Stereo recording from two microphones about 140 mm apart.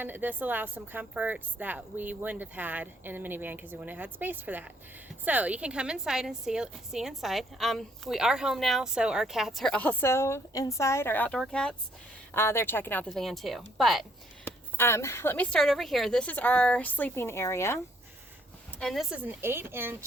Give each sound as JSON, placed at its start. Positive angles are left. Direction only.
{"t": 0.0, "sound": "a woman's voice", "side_deg": -15}
{"t": 12.3, "sound": "a woman's voice", "side_deg": 20}
{"t": 14.4, "sound": "speech", "side_deg": 15}
{"t": 18.8, "sound": "speech", "side_deg": 0}